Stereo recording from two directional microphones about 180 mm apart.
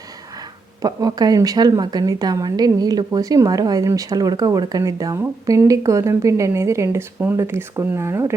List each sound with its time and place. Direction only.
0.8 s speech: 20° right (ahead or behind)